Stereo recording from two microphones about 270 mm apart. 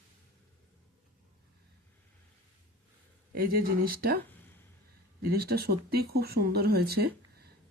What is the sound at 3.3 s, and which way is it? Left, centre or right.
Speech, right.